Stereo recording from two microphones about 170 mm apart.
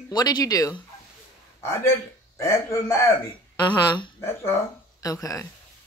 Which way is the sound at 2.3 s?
15° left (ahead or behind).